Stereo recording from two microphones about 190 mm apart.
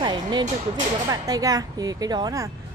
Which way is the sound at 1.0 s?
20° right (ahead or behind).